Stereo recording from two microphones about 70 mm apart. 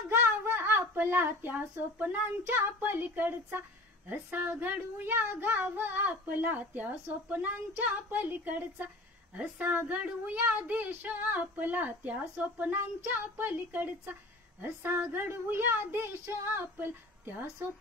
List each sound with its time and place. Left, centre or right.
0.1 s a woman's voice: right